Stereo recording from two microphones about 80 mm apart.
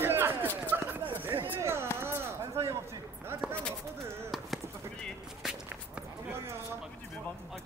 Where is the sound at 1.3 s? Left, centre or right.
Right.